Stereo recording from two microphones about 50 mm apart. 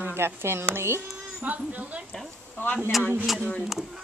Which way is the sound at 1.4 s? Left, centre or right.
Right.